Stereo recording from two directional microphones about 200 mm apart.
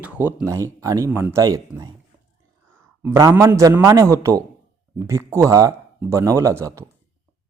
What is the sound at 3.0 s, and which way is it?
Speech, 15° right (ahead or behind).